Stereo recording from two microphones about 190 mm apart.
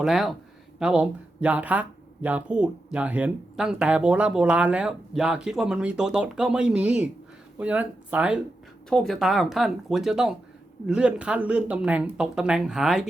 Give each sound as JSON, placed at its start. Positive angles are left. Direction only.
{"t": 0.0, "sound": "speech", "side_deg": 0}